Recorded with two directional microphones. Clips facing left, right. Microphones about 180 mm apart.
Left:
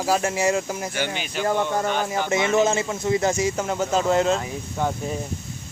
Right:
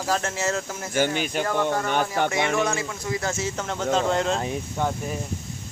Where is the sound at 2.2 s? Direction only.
60° right (ahead or behind).